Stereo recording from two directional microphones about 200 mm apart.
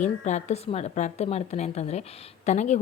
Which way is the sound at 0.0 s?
35° left (ahead or behind).